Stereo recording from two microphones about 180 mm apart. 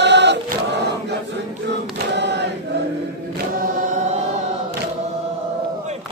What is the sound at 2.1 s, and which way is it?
Chant, 70° right (ahead or behind).